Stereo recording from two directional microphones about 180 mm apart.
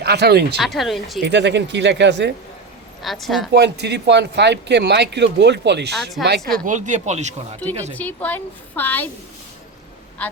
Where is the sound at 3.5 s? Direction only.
70° right (ahead or behind).